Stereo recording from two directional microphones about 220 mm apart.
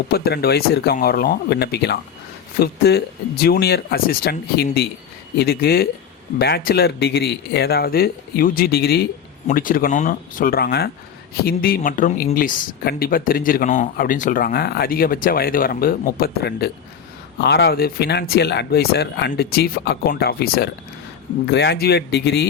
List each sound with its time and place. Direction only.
0.1 s speech: 45° left (ahead or behind)